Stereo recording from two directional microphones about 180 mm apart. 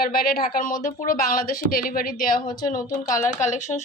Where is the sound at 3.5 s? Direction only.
40° left (ahead or behind).